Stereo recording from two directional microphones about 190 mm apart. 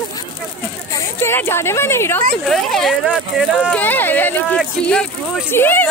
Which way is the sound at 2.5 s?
Centre (ahead or behind).